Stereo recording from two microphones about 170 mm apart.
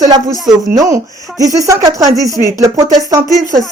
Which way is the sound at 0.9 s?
20° right (ahead or behind).